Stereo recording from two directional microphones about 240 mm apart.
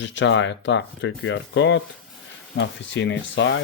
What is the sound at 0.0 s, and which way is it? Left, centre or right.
Speech, left.